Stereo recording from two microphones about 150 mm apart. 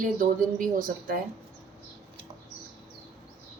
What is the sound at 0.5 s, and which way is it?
Speech, 65° right (ahead or behind).